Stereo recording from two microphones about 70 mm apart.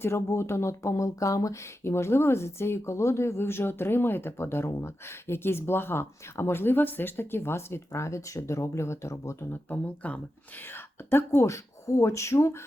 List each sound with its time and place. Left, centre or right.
0.0 s speech: left
9.5 s speech: left
11.1 s speech: left